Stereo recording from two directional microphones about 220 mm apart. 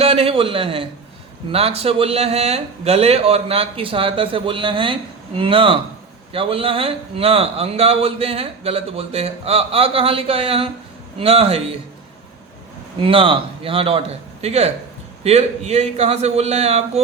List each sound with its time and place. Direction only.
0.0 s a man's voice: 25° right (ahead or behind)
13.0 s speech: 25° right (ahead or behind)